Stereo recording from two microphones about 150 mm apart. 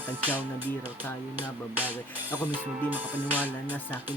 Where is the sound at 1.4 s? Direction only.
10° right (ahead or behind).